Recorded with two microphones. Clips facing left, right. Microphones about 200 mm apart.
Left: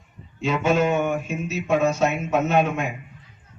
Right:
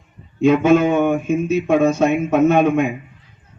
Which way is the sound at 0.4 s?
50° right (ahead or behind).